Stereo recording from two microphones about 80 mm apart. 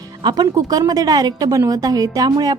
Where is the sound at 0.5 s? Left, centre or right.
Right.